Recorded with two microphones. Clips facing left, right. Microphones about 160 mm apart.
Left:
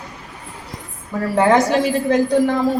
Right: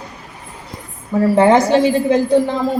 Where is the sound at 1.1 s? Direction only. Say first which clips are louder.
Right 4 dB; 20° right (ahead or behind).